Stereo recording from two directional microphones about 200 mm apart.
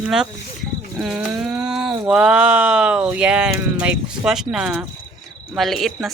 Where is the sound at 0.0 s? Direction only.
5° right (ahead or behind).